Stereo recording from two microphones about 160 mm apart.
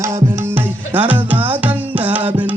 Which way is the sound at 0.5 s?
10° right (ahead or behind).